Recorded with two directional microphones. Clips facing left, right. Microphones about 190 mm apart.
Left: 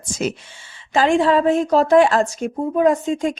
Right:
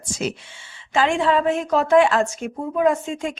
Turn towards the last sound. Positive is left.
turn(degrees=35)  # may be behind; listen again after turning